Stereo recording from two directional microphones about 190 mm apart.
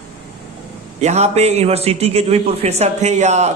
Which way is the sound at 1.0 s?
35° right (ahead or behind).